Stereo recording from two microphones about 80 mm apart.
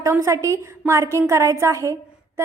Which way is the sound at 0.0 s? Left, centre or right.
Right.